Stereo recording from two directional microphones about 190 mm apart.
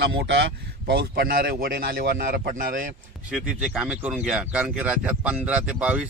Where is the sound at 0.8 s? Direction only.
55° right (ahead or behind).